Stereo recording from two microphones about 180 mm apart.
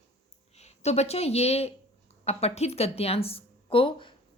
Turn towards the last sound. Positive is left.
turn(degrees=30)  # may be behind; listen again after turning